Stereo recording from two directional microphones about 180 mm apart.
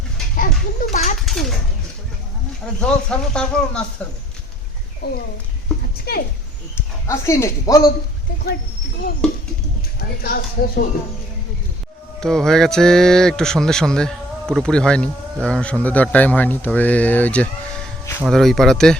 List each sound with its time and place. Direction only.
0.3 s a child's voice: 50° left (ahead or behind)
1.2 s speech: centre (ahead or behind)
2.8 s speech: 5° left (ahead or behind)
6.7 s speech: 15° left (ahead or behind)
10.2 s speech: 55° left (ahead or behind)
12.2 s speech: centre (ahead or behind)